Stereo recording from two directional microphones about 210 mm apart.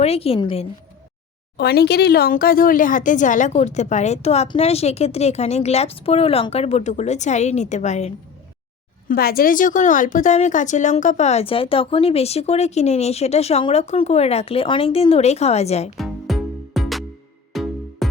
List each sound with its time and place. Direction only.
0.0 s a woman's voice: 30° left (ahead or behind)
1.5 s a woman's voice: 50° left (ahead or behind); by 8.1 s 35° left (ahead or behind)
9.0 s a woman's voice: 45° left (ahead or behind)
16.0 s music: centre (ahead or behind)